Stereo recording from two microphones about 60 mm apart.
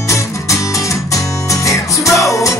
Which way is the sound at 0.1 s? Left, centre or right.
Left.